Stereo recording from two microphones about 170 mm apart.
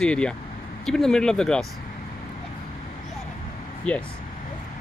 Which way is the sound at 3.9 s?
10° left (ahead or behind).